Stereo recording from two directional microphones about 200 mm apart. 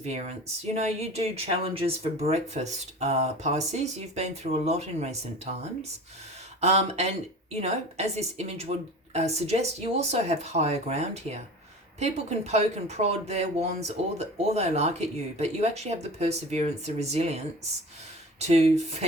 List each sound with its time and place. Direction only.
0.7 s speech: 30° right (ahead or behind)